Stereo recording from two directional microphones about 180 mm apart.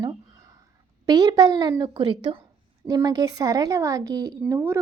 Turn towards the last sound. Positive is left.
turn(degrees=-15)  # may be behind; listen again after turning